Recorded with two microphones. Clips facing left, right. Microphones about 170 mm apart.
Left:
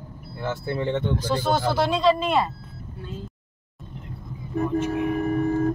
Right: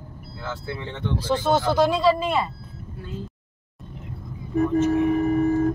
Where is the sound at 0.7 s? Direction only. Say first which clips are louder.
Left 5 dB; 55° left (ahead or behind).